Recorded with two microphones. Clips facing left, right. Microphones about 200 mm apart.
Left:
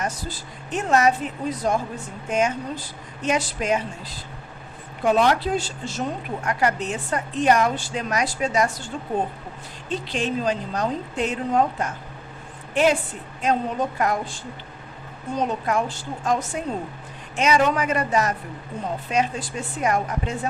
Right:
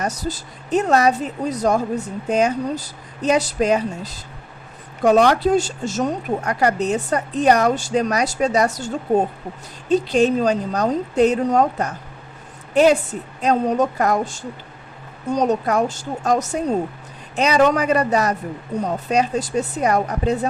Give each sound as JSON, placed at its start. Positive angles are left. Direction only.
{"t": 0.0, "sound": "a woman's voice", "side_deg": -40}
{"t": 5.4, "sound": "a woman's voice", "side_deg": -45}